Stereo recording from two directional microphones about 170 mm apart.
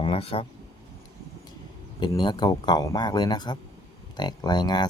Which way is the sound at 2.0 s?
25° left (ahead or behind).